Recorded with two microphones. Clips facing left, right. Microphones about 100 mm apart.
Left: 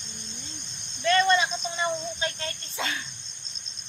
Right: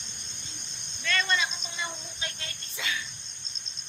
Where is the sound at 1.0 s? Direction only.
30° left (ahead or behind).